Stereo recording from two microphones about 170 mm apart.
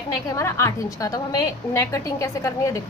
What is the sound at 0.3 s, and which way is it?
A woman's voice, 15° left (ahead or behind).